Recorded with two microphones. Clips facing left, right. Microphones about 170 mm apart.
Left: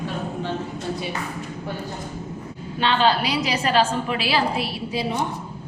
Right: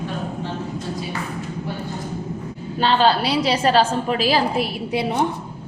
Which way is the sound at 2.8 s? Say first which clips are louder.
Right 2 dB; 40° right (ahead or behind).